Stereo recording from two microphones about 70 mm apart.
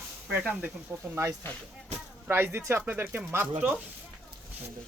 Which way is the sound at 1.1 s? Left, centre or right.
Right.